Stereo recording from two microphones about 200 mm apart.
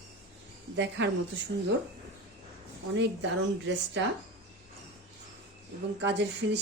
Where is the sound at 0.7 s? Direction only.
65° right (ahead or behind).